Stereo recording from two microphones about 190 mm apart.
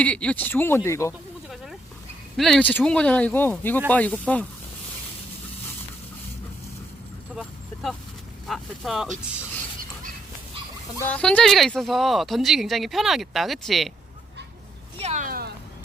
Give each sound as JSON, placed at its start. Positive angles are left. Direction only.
{"t": 0.0, "sound": "speech", "side_deg": 5}
{"t": 2.3, "sound": "speech", "side_deg": 0}
{"t": 7.3, "sound": "vehicle", "side_deg": 0}
{"t": 8.4, "sound": "speech", "side_deg": 0}
{"t": 11.0, "sound": "speech", "side_deg": 5}
{"t": 14.9, "sound": "a sound", "side_deg": -35}